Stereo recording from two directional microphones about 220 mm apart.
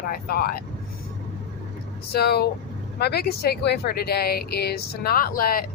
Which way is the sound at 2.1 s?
45° left (ahead or behind).